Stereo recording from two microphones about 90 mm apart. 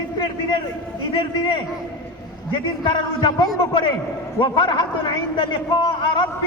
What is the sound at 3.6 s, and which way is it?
A man's voice, 70° left (ahead or behind).